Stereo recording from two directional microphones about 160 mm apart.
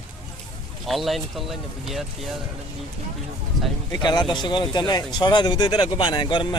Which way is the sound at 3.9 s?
25° left (ahead or behind).